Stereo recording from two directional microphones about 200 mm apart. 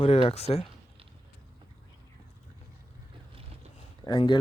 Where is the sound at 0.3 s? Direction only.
30° left (ahead or behind).